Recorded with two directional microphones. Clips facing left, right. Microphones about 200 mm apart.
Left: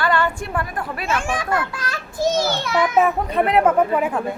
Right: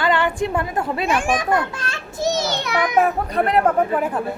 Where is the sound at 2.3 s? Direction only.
20° right (ahead or behind).